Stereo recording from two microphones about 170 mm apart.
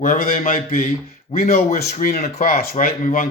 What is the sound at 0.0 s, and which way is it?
Speech, 55° left (ahead or behind).